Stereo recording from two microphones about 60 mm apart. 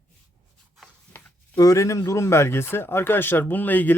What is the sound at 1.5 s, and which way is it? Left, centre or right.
Speech, left.